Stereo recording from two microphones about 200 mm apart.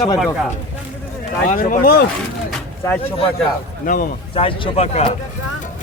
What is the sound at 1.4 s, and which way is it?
Speech, 40° left (ahead or behind).